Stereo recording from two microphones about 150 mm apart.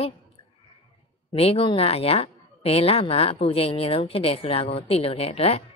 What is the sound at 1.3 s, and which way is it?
A woman's voice, 40° left (ahead or behind).